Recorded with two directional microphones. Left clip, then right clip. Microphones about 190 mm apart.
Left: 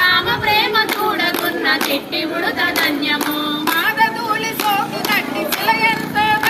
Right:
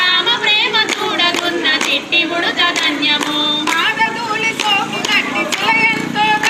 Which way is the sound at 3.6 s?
15° left (ahead or behind).